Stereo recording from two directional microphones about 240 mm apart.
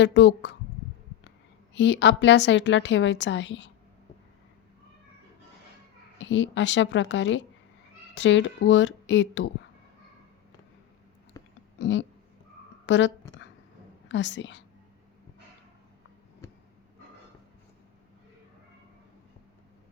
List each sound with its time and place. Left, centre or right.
0.0 s a woman's voice: left
1.7 s a woman's voice: left
6.1 s a woman's voice: left
11.3 s a sound: centre
11.8 s a woman's voice: left